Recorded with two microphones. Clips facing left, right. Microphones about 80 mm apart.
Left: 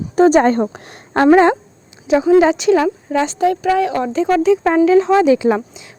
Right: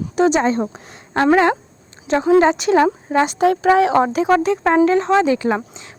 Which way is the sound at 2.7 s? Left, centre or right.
Right.